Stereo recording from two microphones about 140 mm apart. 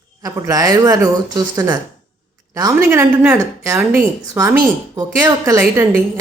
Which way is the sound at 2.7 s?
15° right (ahead or behind).